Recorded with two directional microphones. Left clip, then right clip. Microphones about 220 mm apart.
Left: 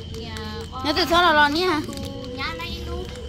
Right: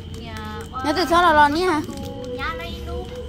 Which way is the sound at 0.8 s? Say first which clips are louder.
Right 1 dB; 15° right (ahead or behind).